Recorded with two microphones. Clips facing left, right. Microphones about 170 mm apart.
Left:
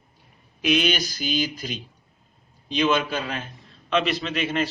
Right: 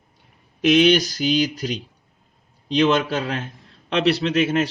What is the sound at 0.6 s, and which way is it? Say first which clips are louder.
A man's voice: right 7 dB; 70° right (ahead or behind).